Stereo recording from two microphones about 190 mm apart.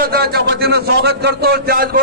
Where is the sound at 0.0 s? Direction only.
55° right (ahead or behind).